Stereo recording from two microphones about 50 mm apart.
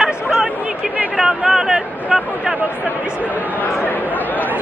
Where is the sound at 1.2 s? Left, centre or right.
Centre.